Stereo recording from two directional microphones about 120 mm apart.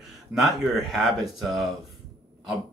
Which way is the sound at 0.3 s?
Centre (ahead or behind).